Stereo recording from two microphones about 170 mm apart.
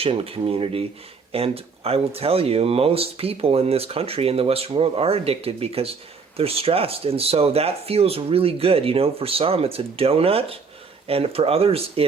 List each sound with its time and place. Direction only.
0.0 s speech: 35° right (ahead or behind)